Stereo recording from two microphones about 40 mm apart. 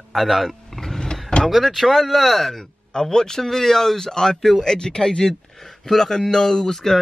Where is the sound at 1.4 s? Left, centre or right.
Centre.